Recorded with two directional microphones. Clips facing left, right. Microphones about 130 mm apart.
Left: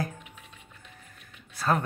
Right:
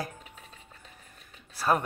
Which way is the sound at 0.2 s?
40° right (ahead or behind).